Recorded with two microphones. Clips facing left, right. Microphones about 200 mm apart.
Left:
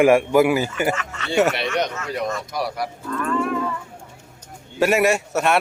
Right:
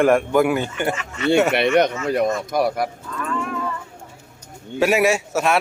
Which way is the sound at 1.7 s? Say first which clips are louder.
Right 7 dB; 55° right (ahead or behind).